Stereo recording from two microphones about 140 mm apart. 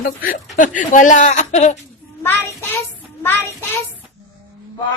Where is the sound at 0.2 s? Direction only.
80° left; by 1.8 s 55° left (ahead or behind).